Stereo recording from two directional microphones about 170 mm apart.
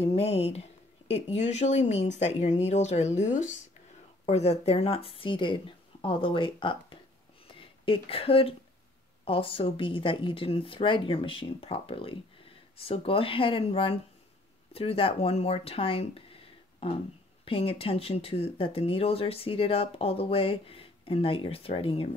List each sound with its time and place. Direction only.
0.0 s speech: 35° left (ahead or behind)